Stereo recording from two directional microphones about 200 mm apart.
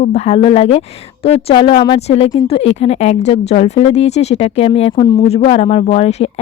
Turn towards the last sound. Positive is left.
turn(degrees=30)  # may be behind; listen again after turning